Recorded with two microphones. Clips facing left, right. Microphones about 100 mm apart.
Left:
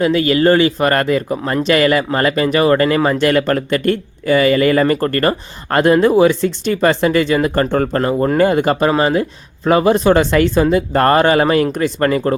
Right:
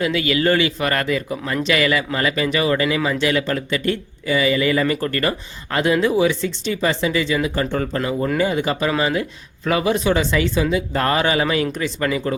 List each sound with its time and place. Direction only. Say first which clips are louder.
0.0 s speech: left 6 dB; 40° left (ahead or behind)